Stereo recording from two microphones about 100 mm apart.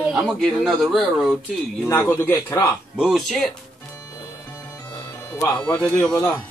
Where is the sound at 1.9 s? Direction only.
20° left (ahead or behind).